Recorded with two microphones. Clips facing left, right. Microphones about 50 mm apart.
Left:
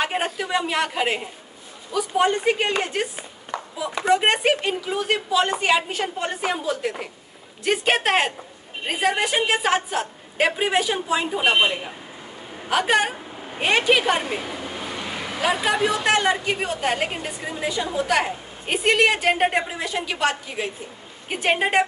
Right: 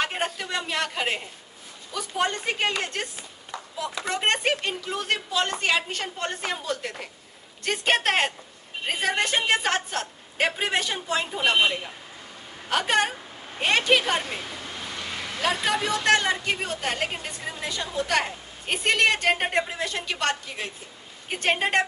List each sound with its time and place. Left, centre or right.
0.0 s a woman's voice: centre
3.5 s clapping: left
4.1 s a woman's voice: centre